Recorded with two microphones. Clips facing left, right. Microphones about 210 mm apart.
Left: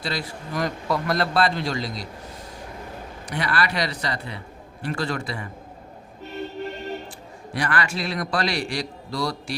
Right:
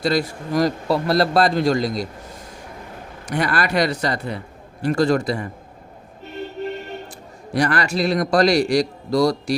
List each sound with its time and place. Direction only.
0.0 s a man's voice: 45° right (ahead or behind)
3.2 s a man's voice: 45° right (ahead or behind)
7.5 s a man's voice: 40° right (ahead or behind)